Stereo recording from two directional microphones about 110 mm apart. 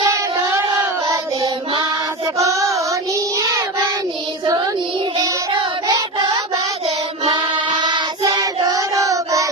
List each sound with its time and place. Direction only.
0.0 s a sound: 30° right (ahead or behind)
2.4 s child singing: 30° right (ahead or behind)
7.3 s child singing: 45° right (ahead or behind)